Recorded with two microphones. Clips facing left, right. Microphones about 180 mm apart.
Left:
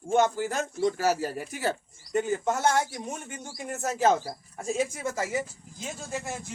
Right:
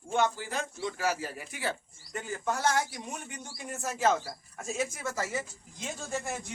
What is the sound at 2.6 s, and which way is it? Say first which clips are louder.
Speech: left 3 dB; 45° left (ahead or behind).